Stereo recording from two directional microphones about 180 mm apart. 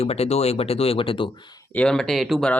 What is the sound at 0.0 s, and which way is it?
Speech, 35° left (ahead or behind).